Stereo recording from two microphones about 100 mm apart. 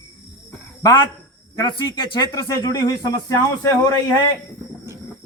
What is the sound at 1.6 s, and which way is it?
Speech, 45° left (ahead or behind).